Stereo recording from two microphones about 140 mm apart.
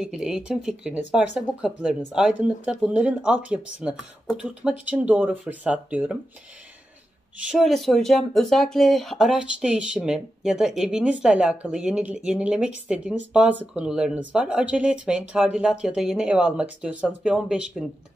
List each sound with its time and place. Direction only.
0.0 s speech: 5° right (ahead or behind)
7.4 s speech: centre (ahead or behind)